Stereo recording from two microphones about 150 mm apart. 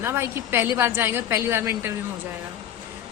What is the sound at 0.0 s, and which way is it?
A woman's voice, 15° right (ahead or behind).